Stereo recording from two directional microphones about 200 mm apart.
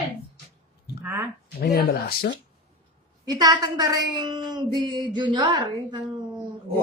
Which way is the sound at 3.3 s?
20° right (ahead or behind).